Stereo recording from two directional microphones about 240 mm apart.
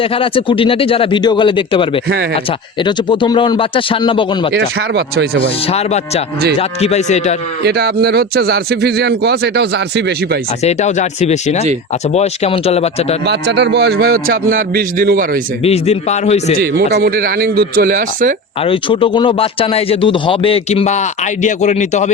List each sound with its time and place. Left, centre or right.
0.0 s speech: left
4.5 s a man's voice: right
5.6 s speech: left
7.6 s a man's voice: right
10.6 s speech: left
13.2 s a man's voice: right
15.6 s speech: left
16.6 s a man's voice: right
18.6 s speech: left